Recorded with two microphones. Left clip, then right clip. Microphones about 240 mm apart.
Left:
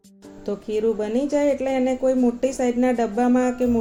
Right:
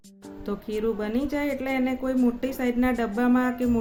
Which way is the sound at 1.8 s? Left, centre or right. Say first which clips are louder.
Left 7 dB; right.